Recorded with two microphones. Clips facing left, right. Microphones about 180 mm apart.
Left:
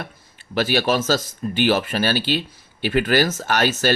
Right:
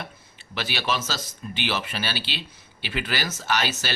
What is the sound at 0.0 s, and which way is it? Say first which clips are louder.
Speech: left 4 dB; 45° left (ahead or behind).